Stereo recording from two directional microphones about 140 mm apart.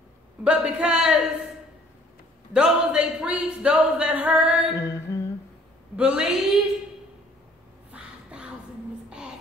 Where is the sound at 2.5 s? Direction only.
5° right (ahead or behind).